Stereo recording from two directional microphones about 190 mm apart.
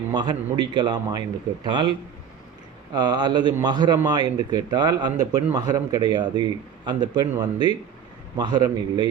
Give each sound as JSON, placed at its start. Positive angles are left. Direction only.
{"t": 0.1, "sound": "a man's voice", "side_deg": -20}